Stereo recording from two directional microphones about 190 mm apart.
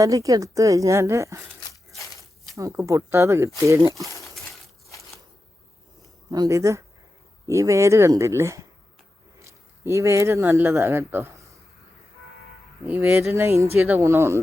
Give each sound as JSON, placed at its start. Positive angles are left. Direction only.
{"t": 0.0, "sound": "a woman's voice", "side_deg": -15}
{"t": 2.6, "sound": "a woman's voice", "side_deg": -15}
{"t": 6.3, "sound": "a woman's voice", "side_deg": -15}
{"t": 12.8, "sound": "a woman's voice", "side_deg": -10}